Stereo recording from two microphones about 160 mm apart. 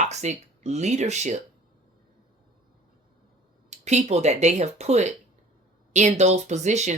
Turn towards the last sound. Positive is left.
turn(degrees=-45)  # may be behind; listen again after turning